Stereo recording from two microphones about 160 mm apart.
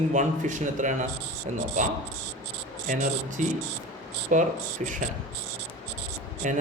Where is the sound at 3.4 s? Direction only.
50° right (ahead or behind).